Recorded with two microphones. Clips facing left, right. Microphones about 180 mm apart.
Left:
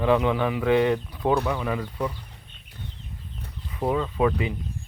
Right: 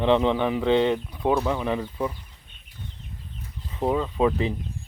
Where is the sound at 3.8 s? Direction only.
15° right (ahead or behind).